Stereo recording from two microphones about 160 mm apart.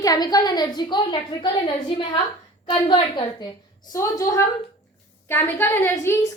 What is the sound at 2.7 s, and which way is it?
Speech, 30° left (ahead or behind).